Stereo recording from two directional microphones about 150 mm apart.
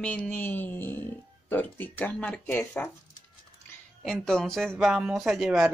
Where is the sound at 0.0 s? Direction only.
5° left (ahead or behind).